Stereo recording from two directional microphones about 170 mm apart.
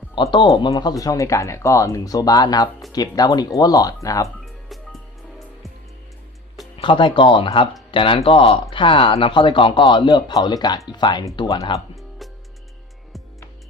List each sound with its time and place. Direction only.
0.2 s speech: 25° left (ahead or behind)
4.4 s music: centre (ahead or behind)
6.7 s speech: 30° left (ahead or behind)
12.2 s music: centre (ahead or behind)